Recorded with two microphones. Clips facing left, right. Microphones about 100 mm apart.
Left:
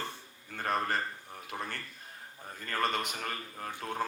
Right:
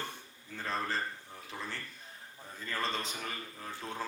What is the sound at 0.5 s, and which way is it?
A man's voice, 60° left (ahead or behind).